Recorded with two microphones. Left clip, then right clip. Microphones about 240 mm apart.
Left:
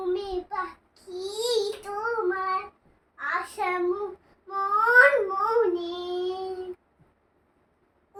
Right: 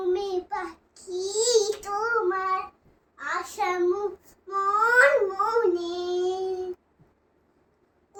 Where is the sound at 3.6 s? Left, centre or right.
Centre.